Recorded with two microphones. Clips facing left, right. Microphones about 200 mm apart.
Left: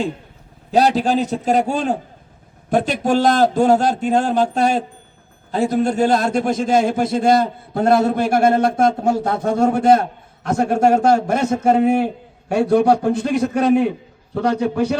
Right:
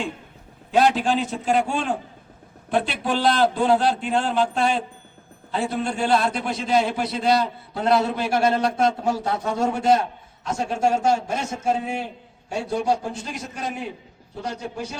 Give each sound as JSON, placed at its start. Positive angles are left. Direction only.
{"t": 0.7, "sound": "a man's voice", "side_deg": 40}